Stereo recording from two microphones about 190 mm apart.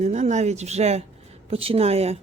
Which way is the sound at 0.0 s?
40° right (ahead or behind).